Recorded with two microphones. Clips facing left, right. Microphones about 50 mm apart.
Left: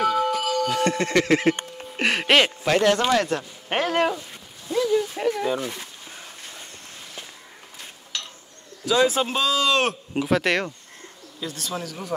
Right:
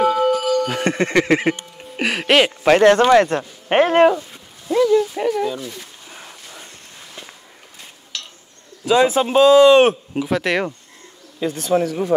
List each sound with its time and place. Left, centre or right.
0.0 s music: centre
0.7 s speech: right
1.8 s speech: centre
2.6 s speech: right
4.9 s speech: centre
5.3 s speech: centre
5.6 s speech: left
6.1 s a sound: centre
8.8 s speech: right
10.1 s speech: centre
11.3 s speech: right